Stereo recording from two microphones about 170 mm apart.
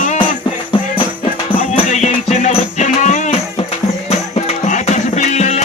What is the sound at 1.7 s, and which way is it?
Music, 40° left (ahead or behind).